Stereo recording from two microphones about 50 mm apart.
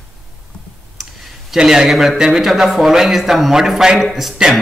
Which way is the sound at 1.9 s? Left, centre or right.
Centre.